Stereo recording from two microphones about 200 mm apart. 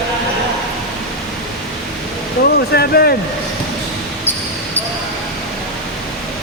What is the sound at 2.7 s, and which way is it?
Speech, 50° left (ahead or behind).